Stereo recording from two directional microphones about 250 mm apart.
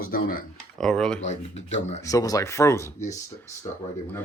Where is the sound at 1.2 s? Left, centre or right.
Left.